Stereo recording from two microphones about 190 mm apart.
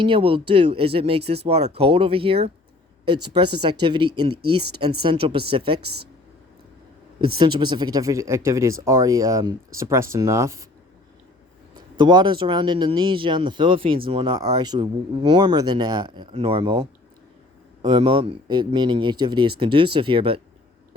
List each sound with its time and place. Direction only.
0.0 s speech: 25° right (ahead or behind)
7.3 s speech: 25° right (ahead or behind)
11.7 s speech: 25° right (ahead or behind)
17.8 s speech: 25° right (ahead or behind)